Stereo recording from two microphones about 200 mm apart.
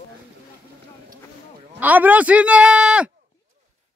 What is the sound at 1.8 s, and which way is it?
A man's voice, 10° right (ahead or behind).